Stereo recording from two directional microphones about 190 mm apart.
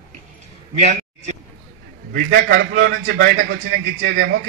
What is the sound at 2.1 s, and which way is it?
A man's voice, 60° right (ahead or behind).